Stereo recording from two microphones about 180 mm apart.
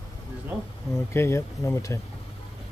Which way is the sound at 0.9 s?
15° left (ahead or behind).